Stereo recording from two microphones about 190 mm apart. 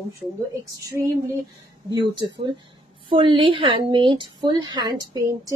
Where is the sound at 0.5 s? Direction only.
15° right (ahead or behind).